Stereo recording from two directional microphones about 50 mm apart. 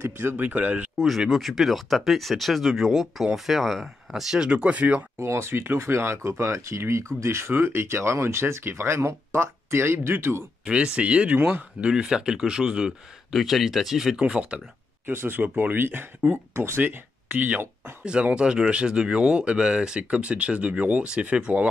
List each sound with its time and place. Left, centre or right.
0.0 s speech: right
0.4 s speech: right
0.9 s speech: centre
4.5 s speech: right
5.1 s speech: right
7.2 s speech: right
10.6 s speech: right
11.3 s speech: right
11.8 s speech: centre
13.3 s speech: centre
14.1 s speech: right
15.0 s speech: right
16.8 s speech: right
18.0 s speech: right